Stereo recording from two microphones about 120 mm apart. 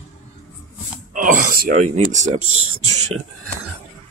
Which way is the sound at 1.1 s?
90° right.